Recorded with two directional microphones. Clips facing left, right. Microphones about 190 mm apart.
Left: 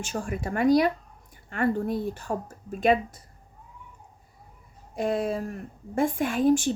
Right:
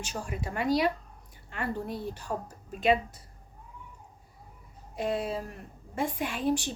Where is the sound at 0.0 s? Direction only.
50° left (ahead or behind).